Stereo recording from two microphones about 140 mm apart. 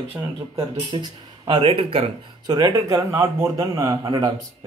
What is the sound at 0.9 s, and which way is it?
Speech, 40° right (ahead or behind).